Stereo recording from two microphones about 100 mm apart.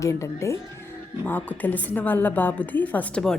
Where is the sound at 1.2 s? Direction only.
15° left (ahead or behind).